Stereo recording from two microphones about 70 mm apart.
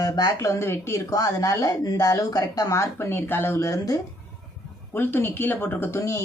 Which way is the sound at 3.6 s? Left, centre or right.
Left.